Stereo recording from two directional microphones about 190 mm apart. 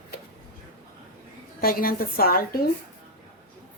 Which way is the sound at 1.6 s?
50° left (ahead or behind).